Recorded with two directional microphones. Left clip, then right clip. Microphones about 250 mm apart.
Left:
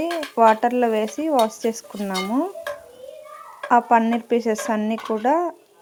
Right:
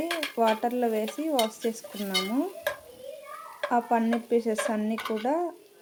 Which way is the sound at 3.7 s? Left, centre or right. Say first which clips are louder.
Left 9 dB; left.